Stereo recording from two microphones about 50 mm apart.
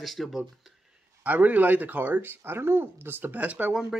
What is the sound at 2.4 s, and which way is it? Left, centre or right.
Speech, right.